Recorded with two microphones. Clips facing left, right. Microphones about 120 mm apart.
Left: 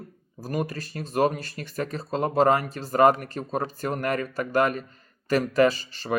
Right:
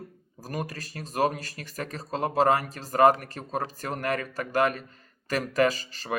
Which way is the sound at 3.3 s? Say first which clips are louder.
Left 3 dB; 40° left (ahead or behind).